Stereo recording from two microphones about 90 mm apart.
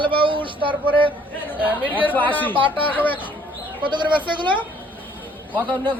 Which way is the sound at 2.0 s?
20° left (ahead or behind).